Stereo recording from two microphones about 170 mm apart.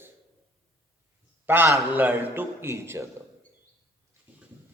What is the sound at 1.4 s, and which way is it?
A man's voice, 10° right (ahead or behind).